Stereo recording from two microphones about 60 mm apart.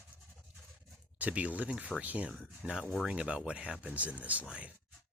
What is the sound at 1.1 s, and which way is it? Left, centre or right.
Speech, right.